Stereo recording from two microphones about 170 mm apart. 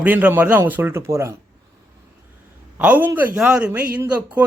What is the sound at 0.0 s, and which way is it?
Speech, 10° right (ahead or behind).